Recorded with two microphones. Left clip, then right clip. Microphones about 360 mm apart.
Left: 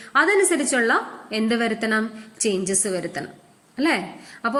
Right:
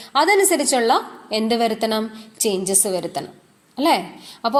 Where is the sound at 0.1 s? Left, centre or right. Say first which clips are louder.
Right 2 dB; centre.